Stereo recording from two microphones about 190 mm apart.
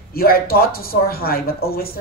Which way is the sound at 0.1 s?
50° left (ahead or behind).